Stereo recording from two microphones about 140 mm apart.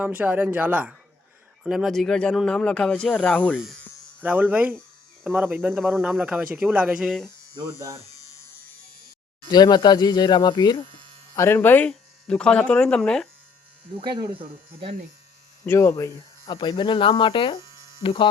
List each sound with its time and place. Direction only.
0.0 s speech: 10° right (ahead or behind); by 3.6 s 10° left (ahead or behind)
4.2 s speech: 10° right (ahead or behind)
9.5 s speech: 30° left (ahead or behind)
11.3 s speech: 15° left (ahead or behind)
14.0 s speech: 30° right (ahead or behind)
15.6 s speech: 15° left (ahead or behind)
16.5 s speech: 35° left (ahead or behind)